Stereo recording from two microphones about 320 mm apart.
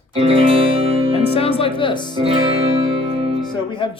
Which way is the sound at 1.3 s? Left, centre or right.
Centre.